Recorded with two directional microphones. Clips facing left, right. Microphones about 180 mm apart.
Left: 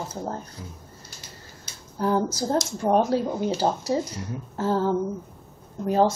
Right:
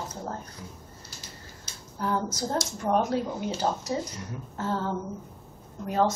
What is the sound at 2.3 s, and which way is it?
Speech, 30° left (ahead or behind).